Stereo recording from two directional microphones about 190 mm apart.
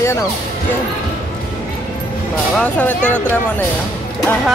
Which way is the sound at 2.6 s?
10° left (ahead or behind).